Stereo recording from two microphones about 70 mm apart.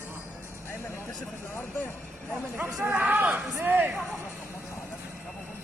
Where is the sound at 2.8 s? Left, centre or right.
Right.